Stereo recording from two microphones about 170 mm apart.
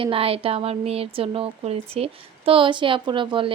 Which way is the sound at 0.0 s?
35° right (ahead or behind).